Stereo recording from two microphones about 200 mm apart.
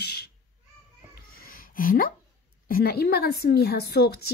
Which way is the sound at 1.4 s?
45° left (ahead or behind).